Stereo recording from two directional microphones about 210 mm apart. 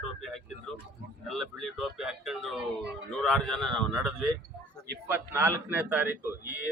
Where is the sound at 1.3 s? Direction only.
Centre (ahead or behind).